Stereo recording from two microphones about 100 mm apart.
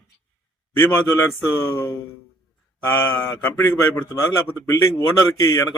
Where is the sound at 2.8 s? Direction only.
20° left (ahead or behind).